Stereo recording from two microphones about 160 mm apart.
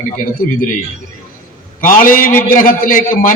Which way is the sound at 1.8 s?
60° left (ahead or behind).